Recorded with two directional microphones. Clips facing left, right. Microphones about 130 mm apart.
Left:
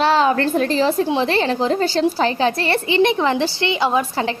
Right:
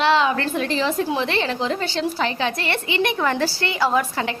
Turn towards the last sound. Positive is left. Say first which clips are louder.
# left 2 dB
turn(degrees=25)  # may be behind; listen again after turning